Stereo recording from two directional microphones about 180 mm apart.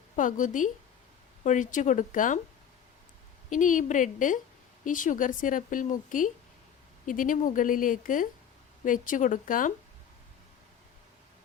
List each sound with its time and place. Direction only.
0.2 s a woman's voice: 45° left (ahead or behind)
3.5 s a woman's voice: 45° left (ahead or behind)